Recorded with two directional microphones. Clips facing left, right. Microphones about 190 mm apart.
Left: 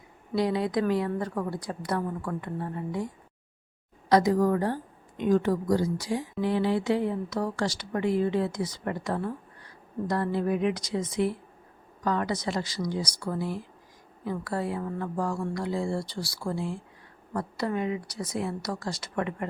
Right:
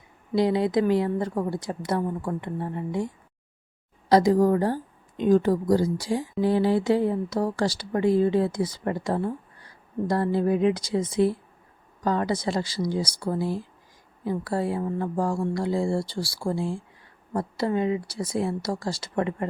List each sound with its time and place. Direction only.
0.3 s a woman's voice: 25° right (ahead or behind)
4.1 s a woman's voice: 30° right (ahead or behind)